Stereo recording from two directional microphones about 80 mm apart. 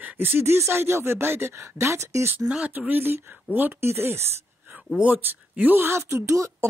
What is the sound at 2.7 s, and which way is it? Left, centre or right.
Speech, right.